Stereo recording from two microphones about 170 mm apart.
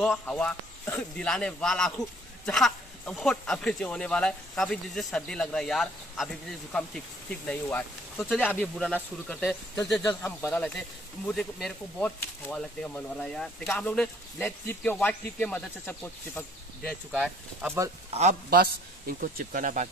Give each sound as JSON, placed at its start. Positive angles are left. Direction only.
{"t": 0.0, "sound": "speech", "side_deg": 5}
{"t": 10.0, "sound": "speech", "side_deg": 15}
{"t": 17.1, "sound": "speech", "side_deg": -5}
{"t": 18.5, "sound": "speech", "side_deg": -60}